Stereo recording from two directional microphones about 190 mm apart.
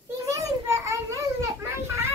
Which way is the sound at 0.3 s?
15° right (ahead or behind).